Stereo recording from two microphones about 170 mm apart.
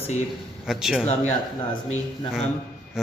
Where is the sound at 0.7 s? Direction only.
Centre (ahead or behind).